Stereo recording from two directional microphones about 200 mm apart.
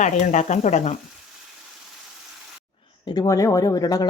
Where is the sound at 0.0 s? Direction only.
35° left (ahead or behind).